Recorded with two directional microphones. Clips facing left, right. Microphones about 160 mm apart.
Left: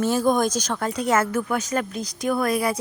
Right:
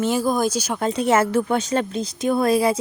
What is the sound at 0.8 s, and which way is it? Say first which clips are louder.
Speech: right 4 dB; 25° right (ahead or behind).